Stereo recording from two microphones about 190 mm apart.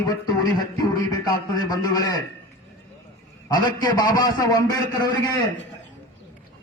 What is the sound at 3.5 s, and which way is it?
A man's voice, 20° left (ahead or behind).